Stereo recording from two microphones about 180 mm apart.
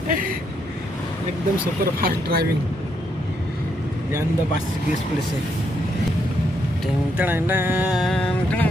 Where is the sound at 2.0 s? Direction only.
60° right (ahead or behind).